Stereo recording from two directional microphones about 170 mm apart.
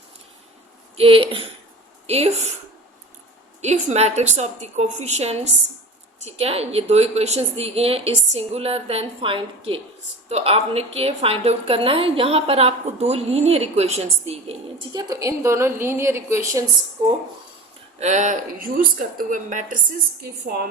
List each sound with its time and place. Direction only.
0.9 s a woman's voice: 35° right (ahead or behind)
3.6 s a woman's voice: 40° right (ahead or behind)
14.9 s a woman's voice: 25° right (ahead or behind)
18.0 s speech: 45° right (ahead or behind)